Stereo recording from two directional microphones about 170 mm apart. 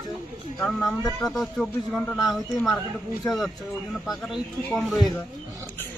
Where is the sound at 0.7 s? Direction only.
15° left (ahead or behind).